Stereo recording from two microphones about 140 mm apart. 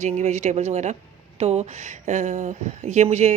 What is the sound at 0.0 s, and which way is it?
A woman's voice, 55° right (ahead or behind).